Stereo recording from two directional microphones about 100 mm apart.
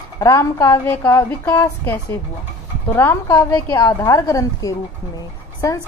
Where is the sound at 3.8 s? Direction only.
40° left (ahead or behind).